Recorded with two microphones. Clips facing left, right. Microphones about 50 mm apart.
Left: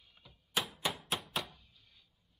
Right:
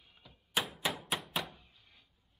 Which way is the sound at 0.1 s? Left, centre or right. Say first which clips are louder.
Right 1 dB; centre.